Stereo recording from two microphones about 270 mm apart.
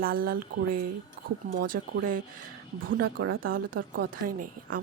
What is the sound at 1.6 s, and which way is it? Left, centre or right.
A woman's voice, right.